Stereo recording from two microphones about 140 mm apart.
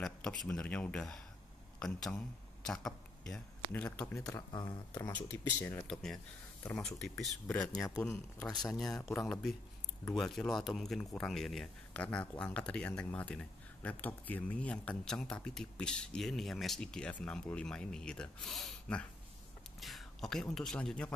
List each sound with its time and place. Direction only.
0.0 s speech: 5° left (ahead or behind)
4.1 s speech: 25° left (ahead or behind)
5.0 s speech: 15° left (ahead or behind)
5.9 s speech: 5° left (ahead or behind)
8.7 s speech: 5° left (ahead or behind)